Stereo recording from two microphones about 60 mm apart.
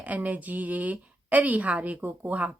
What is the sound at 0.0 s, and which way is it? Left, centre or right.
Speech, right.